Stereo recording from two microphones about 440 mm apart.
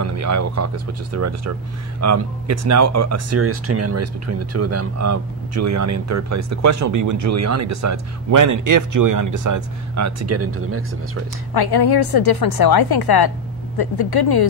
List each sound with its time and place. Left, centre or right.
0.0 s a sound: right
1.1 s speech: right
11.5 s a woman's voice: left